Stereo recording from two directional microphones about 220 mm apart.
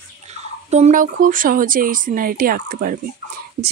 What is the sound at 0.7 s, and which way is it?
Speech, 35° right (ahead or behind).